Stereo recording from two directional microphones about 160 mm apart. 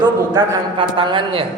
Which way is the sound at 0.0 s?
30° right (ahead or behind).